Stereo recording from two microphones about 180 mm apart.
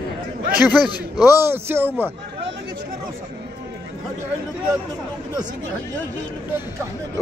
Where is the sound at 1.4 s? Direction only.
15° right (ahead or behind).